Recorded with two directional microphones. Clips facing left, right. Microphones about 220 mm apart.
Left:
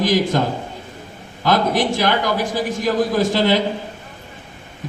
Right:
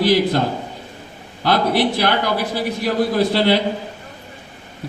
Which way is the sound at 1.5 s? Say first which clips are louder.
Even; 45° left (ahead or behind).